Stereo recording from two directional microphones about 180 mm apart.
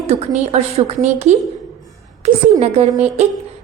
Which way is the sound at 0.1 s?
35° right (ahead or behind).